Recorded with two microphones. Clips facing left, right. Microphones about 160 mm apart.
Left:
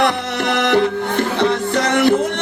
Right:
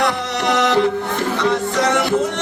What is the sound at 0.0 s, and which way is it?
Music, 55° left (ahead or behind).